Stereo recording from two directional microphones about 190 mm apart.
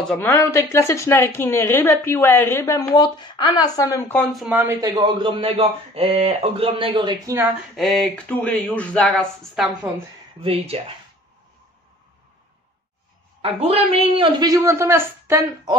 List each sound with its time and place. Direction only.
0.0 s speech: 10° left (ahead or behind); by 7.3 s 25° right (ahead or behind)
7.7 s speech: centre (ahead or behind)
13.4 s a man's voice: 30° right (ahead or behind)